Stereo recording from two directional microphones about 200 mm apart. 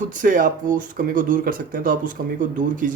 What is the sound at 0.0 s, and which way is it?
Speech, 40° right (ahead or behind).